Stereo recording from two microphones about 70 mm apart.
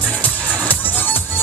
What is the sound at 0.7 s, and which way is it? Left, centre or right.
Music, left.